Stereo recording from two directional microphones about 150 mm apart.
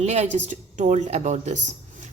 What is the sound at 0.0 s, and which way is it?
A woman's voice, 50° right (ahead or behind).